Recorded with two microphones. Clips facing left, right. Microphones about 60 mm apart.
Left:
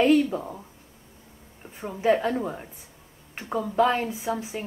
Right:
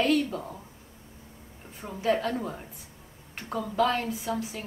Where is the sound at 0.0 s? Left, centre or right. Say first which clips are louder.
Left 5 dB; centre.